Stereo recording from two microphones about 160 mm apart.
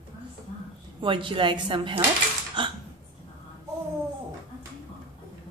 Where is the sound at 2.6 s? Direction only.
30° right (ahead or behind).